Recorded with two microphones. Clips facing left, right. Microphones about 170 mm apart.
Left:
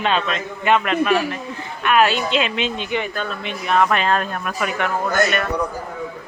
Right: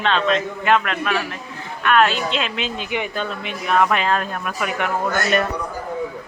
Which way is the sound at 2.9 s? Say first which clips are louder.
Left 1 dB; 15° right (ahead or behind).